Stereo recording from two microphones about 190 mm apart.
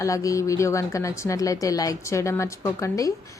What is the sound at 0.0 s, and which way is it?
A woman's voice, 15° left (ahead or behind).